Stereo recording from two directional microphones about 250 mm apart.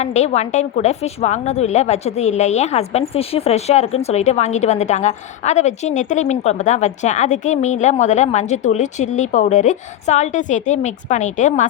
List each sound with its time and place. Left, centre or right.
0.0 s a woman's voice: left